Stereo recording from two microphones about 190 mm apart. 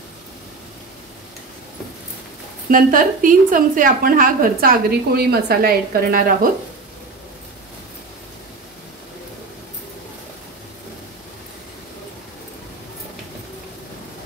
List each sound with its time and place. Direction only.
2.7 s a woman's voice: 45° right (ahead or behind)